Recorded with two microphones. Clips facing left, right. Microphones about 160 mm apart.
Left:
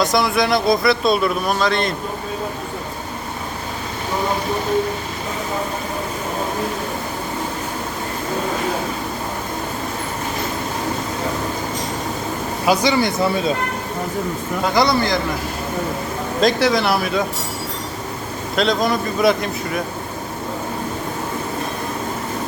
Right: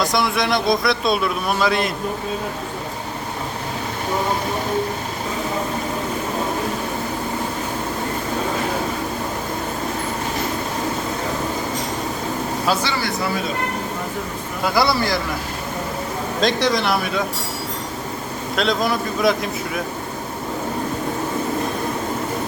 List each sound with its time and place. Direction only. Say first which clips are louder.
0.0 s speech: left 3 dB; centre (ahead or behind)
12.6 s speech: left 7 dB; 15° left (ahead or behind)
14.8 s speech: left 2 dB; 5° right (ahead or behind)
16.4 s speech: left 3 dB; 5° left (ahead or behind)
18.5 s speech: left 2 dB; centre (ahead or behind)